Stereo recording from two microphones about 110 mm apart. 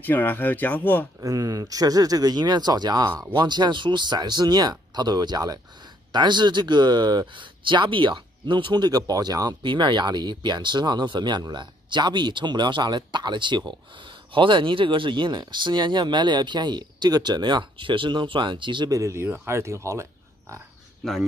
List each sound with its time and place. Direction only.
0.0 s speech: 15° left (ahead or behind)
1.2 s speech: 35° right (ahead or behind)
18.9 s speech: 30° right (ahead or behind)
21.0 s speech: centre (ahead or behind)